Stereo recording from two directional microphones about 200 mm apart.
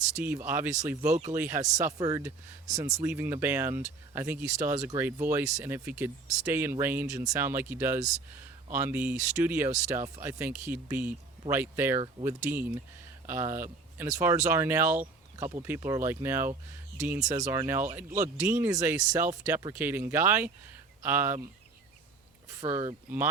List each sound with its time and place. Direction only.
0.2 s speech: 10° right (ahead or behind)
22.6 s speech: 15° right (ahead or behind)